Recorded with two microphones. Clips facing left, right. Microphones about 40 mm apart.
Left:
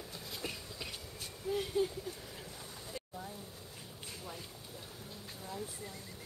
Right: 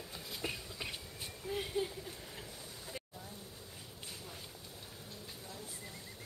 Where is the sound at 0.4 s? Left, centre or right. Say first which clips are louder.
Right 2 dB; centre.